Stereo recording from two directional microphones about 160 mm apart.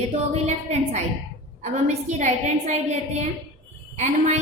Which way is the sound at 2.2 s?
50° right (ahead or behind).